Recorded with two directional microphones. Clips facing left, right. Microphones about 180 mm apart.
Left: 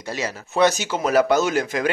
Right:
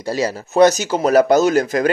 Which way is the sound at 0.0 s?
35° right (ahead or behind).